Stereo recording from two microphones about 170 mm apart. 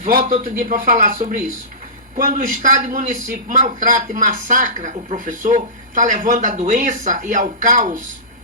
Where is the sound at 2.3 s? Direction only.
55° right (ahead or behind).